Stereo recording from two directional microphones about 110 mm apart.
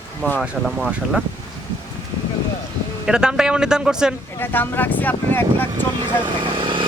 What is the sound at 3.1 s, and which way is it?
Speech, 5° right (ahead or behind).